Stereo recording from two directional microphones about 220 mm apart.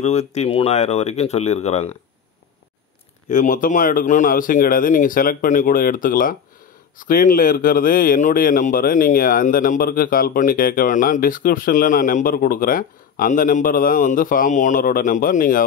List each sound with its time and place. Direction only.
0.0 s speech: 30° left (ahead or behind)
3.3 s speech: 35° left (ahead or behind)